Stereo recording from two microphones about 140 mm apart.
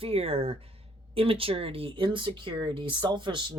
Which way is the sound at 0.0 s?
45° right (ahead or behind).